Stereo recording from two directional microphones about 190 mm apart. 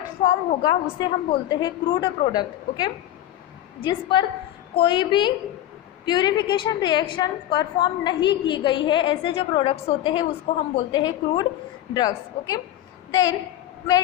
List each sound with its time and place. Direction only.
0.3 s a woman's voice: 20° left (ahead or behind)